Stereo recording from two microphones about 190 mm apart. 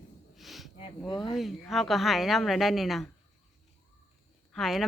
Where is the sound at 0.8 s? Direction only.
25° left (ahead or behind).